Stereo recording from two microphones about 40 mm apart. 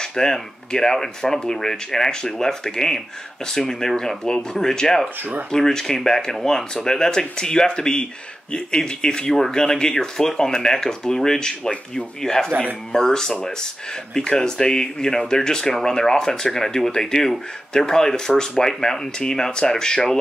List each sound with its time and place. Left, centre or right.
0.0 s speech: centre